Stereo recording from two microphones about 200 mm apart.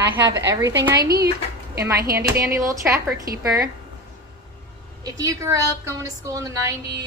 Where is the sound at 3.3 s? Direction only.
50° right (ahead or behind).